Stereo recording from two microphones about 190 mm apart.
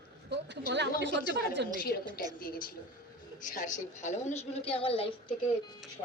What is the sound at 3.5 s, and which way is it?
A woman's voice, 40° left (ahead or behind).